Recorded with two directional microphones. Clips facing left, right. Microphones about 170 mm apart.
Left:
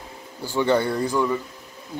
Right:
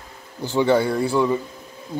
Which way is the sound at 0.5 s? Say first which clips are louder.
Right 2 dB; 10° right (ahead or behind).